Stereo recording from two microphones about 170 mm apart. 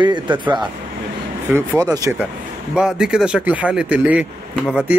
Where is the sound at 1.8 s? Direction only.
20° right (ahead or behind).